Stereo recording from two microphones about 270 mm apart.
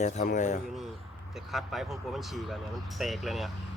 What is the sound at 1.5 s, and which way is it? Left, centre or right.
Speech, centre.